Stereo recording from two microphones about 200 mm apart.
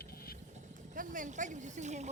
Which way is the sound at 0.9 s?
40° right (ahead or behind).